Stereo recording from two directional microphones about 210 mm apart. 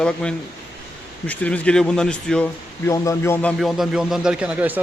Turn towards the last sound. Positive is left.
turn(degrees=-5)  # may be behind; listen again after turning